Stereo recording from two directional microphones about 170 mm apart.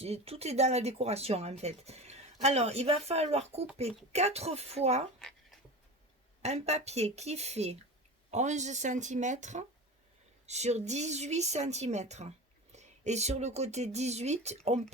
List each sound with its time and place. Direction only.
0.0 s speech: 35° right (ahead or behind)
6.4 s speech: 40° right (ahead or behind)